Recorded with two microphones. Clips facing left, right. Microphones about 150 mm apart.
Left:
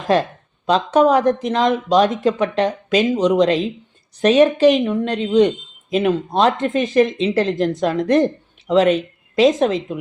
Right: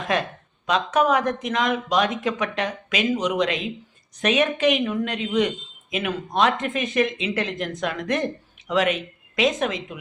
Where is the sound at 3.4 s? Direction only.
35° left (ahead or behind).